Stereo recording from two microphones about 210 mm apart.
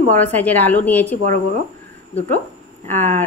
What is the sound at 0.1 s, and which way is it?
A woman's voice, 10° left (ahead or behind).